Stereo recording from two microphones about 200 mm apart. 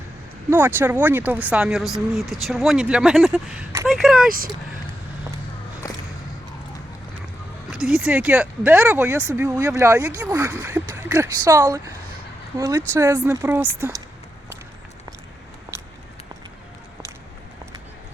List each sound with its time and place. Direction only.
0.5 s speech: 10° right (ahead or behind)
7.7 s speech: centre (ahead or behind)
15.7 s a sound: 10° right (ahead or behind)